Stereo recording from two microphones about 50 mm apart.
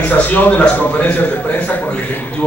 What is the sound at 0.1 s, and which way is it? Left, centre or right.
A man's voice, left.